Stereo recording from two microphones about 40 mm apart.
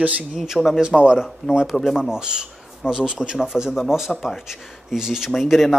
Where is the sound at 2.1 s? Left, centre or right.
Centre.